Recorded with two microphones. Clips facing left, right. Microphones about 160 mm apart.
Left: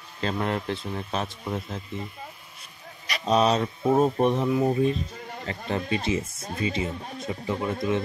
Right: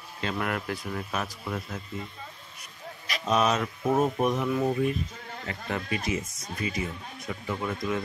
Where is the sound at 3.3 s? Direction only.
30° left (ahead or behind).